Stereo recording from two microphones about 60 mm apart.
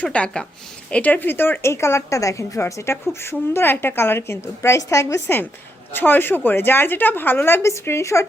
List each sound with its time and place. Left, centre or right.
0.0 s a woman's voice: centre; by 1.7 s left
1.7 s a woman's voice: left
3.2 s a woman's voice: left
4.8 s a woman's voice: left
5.9 s a woman's voice: left
7.6 s a woman's voice: left